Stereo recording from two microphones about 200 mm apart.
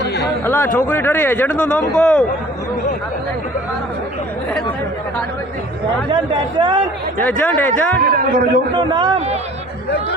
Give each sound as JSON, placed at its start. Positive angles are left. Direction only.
{"t": 0.0, "sound": "a sound", "side_deg": 55}
{"t": 0.4, "sound": "a man's voice", "side_deg": 10}
{"t": 6.6, "sound": "a man's voice", "side_deg": -25}
{"t": 7.3, "sound": "a man's voice", "side_deg": 5}
{"t": 8.1, "sound": "a man's voice", "side_deg": -45}
{"t": 8.7, "sound": "a man's voice", "side_deg": -25}